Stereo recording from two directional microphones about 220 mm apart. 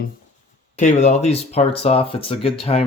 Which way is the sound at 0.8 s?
30° left (ahead or behind).